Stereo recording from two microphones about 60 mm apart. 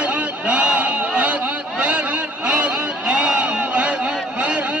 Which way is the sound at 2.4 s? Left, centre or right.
Centre.